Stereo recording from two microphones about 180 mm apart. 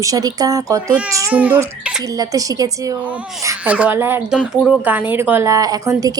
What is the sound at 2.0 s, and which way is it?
Speech, 20° right (ahead or behind).